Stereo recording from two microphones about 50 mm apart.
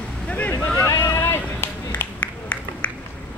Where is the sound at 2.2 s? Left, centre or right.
Left.